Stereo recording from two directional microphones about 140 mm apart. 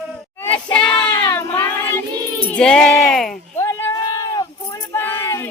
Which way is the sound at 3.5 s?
20° left (ahead or behind).